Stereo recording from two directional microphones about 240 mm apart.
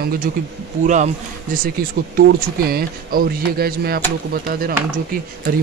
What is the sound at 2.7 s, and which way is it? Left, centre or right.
Speech, right.